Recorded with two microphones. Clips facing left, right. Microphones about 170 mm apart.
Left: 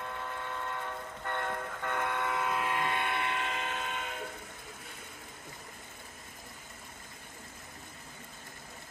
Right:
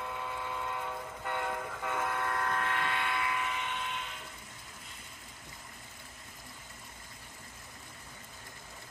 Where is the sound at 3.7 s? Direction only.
50° left (ahead or behind).